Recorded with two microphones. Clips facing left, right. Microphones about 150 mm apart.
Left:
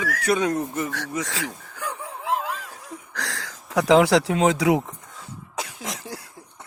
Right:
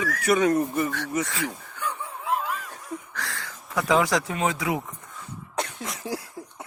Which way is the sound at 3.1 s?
90° left.